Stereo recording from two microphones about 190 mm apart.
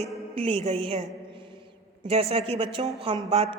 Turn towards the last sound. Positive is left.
turn(degrees=-30)  # may be behind; listen again after turning